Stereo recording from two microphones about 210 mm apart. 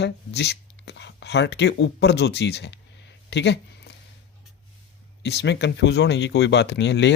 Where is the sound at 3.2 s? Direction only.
55° left (ahead or behind).